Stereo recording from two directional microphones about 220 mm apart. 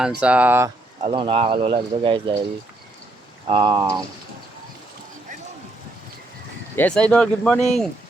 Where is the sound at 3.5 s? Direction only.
20° right (ahead or behind).